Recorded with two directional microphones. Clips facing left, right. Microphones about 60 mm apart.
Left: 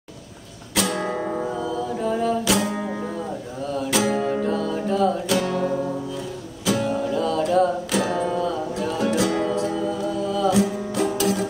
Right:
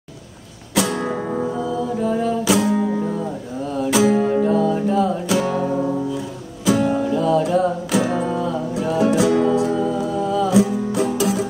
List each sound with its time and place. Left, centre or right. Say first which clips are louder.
0.7 s music: right 3 dB; centre
2.7 s music: right 7 dB; centre
3.7 s music: right 5 dB; centre